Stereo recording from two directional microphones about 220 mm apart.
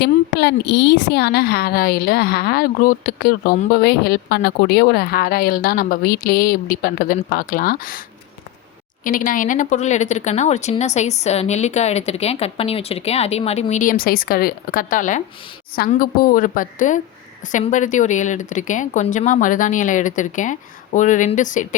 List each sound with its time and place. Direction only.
0.0 s a woman's voice: 50° left (ahead or behind)
9.0 s speech: 40° left (ahead or behind)